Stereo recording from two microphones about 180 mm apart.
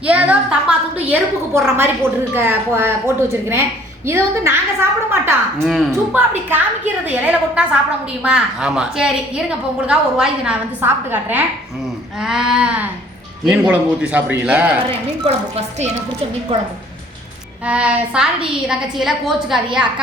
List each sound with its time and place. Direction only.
0.0 s a woman's voice: 10° right (ahead or behind)
4.0 s a woman's voice: 15° right (ahead or behind)
5.6 s a woman's voice: centre (ahead or behind)
6.1 s a woman's voice: 10° right (ahead or behind)
15.2 s a woman's voice: 35° right (ahead or behind)
17.7 s a woman's voice: 5° right (ahead or behind)